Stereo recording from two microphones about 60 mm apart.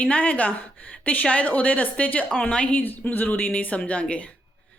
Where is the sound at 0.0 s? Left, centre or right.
Left.